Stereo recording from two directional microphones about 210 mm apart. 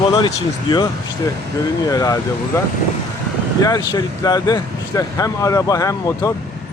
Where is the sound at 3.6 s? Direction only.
15° left (ahead or behind).